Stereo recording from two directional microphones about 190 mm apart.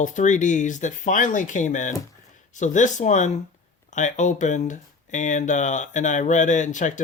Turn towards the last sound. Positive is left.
turn(degrees=40)  # may be behind; listen again after turning